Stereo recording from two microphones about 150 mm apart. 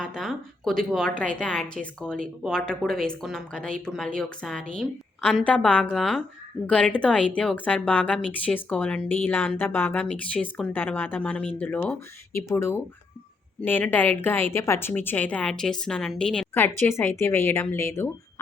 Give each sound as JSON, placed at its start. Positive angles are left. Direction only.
{"t": 0.0, "sound": "a woman's voice", "side_deg": 5}
{"t": 16.6, "sound": "a woman's voice", "side_deg": 15}